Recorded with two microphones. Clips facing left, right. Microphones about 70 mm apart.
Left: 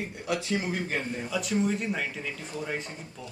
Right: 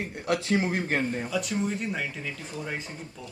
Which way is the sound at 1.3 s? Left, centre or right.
Centre.